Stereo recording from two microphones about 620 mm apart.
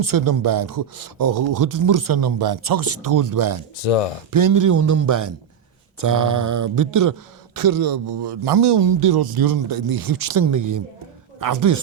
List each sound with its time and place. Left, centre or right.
0.0 s speech: right
3.8 s speech: left
4.3 s a woman's voice: right